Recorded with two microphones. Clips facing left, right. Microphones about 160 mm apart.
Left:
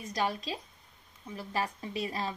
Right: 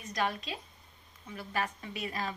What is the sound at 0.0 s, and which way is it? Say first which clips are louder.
Speech: left 1 dB; 30° left (ahead or behind).